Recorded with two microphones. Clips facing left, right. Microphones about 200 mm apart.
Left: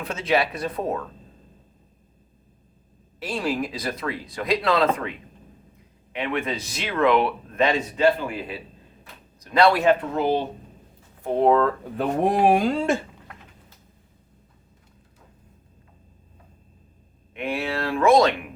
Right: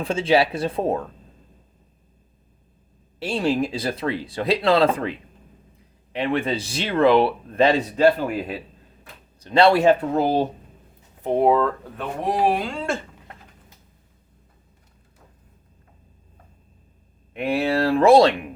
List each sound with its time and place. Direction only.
0.0 s speech: 30° right (ahead or behind)
3.2 s speech: 25° right (ahead or behind)
6.1 s speech: 30° right (ahead or behind)
9.4 s speech: 25° right (ahead or behind)
11.2 s speech: 15° right (ahead or behind)
12.2 s speech: 50° left (ahead or behind)
17.3 s speech: 35° right (ahead or behind)